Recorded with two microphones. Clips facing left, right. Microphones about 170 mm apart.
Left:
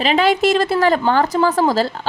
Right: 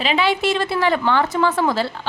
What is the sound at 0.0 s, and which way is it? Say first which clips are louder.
A woman's voice: left 4 dB; 40° left (ahead or behind).